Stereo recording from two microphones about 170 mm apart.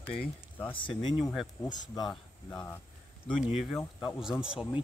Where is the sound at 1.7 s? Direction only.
25° left (ahead or behind).